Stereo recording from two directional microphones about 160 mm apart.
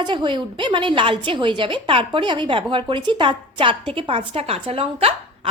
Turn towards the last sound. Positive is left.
turn(degrees=-35)  # may be behind; listen again after turning